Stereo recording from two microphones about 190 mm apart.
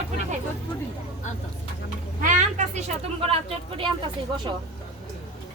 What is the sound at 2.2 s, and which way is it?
Speech, 40° right (ahead or behind).